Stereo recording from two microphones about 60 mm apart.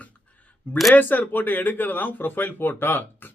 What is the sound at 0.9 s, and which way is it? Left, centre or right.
Speech, left.